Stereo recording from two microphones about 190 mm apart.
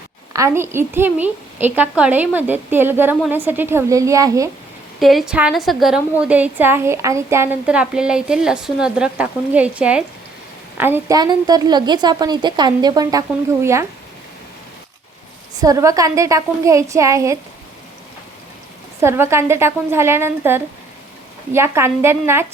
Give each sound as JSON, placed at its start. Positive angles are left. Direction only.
{"t": 0.3, "sound": "a woman's voice", "side_deg": -15}
{"t": 4.9, "sound": "a woman's voice", "side_deg": 0}
{"t": 15.6, "sound": "a woman's voice", "side_deg": -20}
{"t": 18.9, "sound": "a woman's voice", "side_deg": -15}